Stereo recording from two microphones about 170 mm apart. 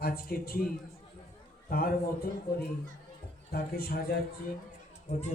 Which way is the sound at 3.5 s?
60° left (ahead or behind).